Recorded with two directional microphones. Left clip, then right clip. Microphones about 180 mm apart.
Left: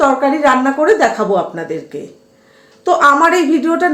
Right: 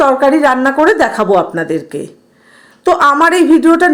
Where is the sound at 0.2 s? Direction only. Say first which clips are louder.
Right 3 dB; 60° right (ahead or behind).